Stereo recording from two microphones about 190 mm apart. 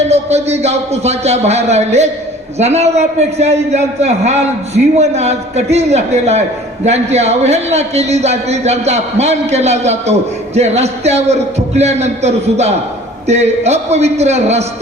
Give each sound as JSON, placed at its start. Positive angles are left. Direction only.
{"t": 0.1, "sound": "a man's voice", "side_deg": -35}